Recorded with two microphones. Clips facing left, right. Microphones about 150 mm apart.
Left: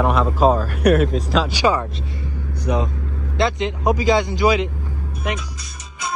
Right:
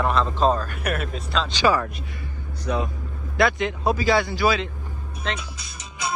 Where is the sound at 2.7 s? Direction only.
15° left (ahead or behind).